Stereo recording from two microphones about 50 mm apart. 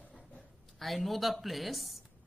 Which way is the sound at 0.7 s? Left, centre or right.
Centre.